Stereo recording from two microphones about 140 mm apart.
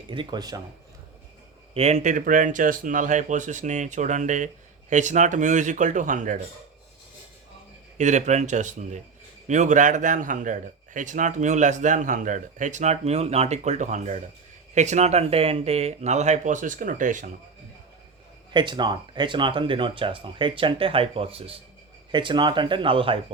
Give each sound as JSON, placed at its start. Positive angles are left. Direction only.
{"t": 0.1, "sound": "speech", "side_deg": -35}
{"t": 1.7, "sound": "a man's voice", "side_deg": -50}
{"t": 7.9, "sound": "a man's voice", "side_deg": -55}
{"t": 18.5, "sound": "speech", "side_deg": -35}